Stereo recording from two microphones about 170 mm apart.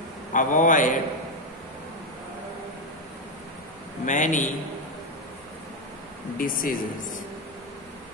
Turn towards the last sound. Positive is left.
turn(degrees=55)  # may be behind; listen again after turning